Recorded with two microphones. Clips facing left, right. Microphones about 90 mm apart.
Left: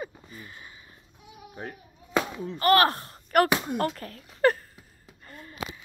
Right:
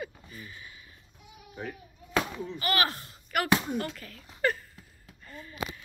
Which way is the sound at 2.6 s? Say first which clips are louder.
Left 9 dB; 40° left (ahead or behind).